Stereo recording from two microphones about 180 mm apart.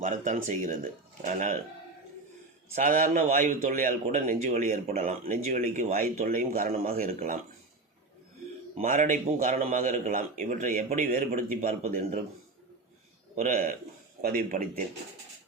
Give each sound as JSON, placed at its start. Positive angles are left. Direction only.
{"t": 0.0, "sound": "speech", "side_deg": -45}
{"t": 2.7, "sound": "speech", "side_deg": -50}
{"t": 8.8, "sound": "speech", "side_deg": -45}
{"t": 13.3, "sound": "speech", "side_deg": -50}